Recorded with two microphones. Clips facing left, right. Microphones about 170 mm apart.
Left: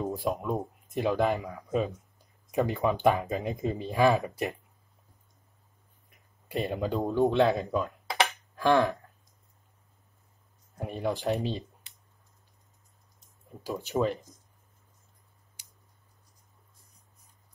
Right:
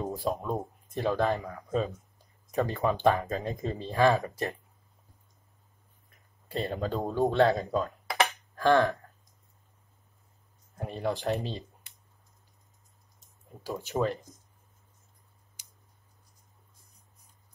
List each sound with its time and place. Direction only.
0.0 s speech: 10° left (ahead or behind)
6.0 s a sound: 15° left (ahead or behind)
7.2 s speech: 15° left (ahead or behind)
10.8 s speech: 15° left (ahead or behind)
13.7 s speech: 15° left (ahead or behind)